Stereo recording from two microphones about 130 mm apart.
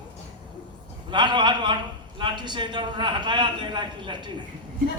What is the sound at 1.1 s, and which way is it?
A man's voice, 35° right (ahead or behind).